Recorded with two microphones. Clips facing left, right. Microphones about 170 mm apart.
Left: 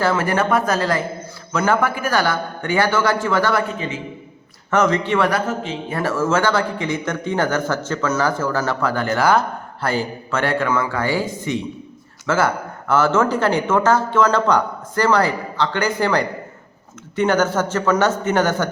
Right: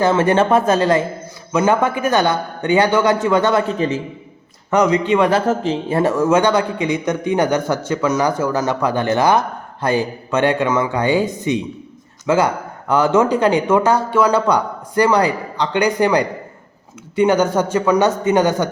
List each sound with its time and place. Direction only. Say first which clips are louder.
0.0 s a man's voice: right 4 dB; 25° right (ahead or behind)
3.8 s a man's voice: right 8 dB; 40° right (ahead or behind)
4.7 s a man's voice: right 3 dB; 15° right (ahead or behind)